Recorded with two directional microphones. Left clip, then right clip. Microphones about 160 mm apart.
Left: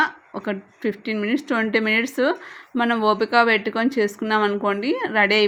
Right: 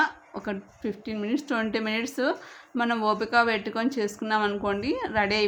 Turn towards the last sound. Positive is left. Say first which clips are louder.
# left 7 dB
turn(degrees=25)  # may be behind; listen again after turning